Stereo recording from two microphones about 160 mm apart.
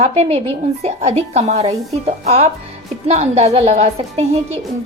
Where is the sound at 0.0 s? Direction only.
40° right (ahead or behind).